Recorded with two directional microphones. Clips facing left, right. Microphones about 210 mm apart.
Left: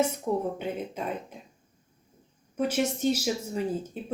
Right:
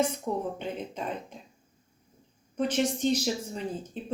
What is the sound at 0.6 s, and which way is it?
Speech, 5° left (ahead or behind).